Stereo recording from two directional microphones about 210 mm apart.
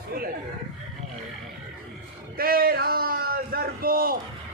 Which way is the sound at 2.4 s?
45° right (ahead or behind).